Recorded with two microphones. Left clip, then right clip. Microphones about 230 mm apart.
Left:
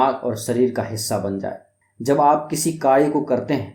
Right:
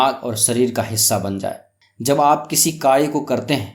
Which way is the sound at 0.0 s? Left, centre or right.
Right.